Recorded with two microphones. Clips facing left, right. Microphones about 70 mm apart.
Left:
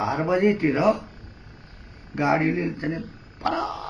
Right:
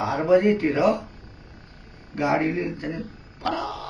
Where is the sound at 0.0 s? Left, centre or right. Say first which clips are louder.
Right 2 dB; left.